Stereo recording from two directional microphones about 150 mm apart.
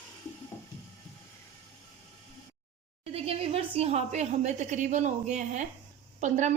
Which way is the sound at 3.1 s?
40° right (ahead or behind).